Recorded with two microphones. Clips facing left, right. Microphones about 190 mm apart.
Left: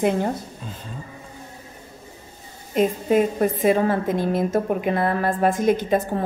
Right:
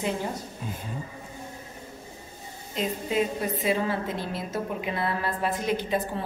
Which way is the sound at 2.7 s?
50° left (ahead or behind).